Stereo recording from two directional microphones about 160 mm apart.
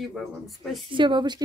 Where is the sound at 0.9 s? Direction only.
30° right (ahead or behind).